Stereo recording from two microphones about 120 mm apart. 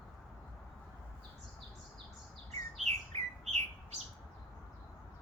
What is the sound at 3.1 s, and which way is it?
Bird, 60° right (ahead or behind).